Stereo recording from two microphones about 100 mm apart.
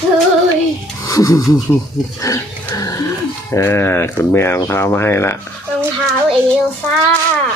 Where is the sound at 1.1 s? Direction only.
35° left (ahead or behind).